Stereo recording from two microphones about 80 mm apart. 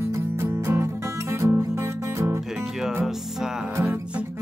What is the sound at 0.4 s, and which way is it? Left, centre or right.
Music, right.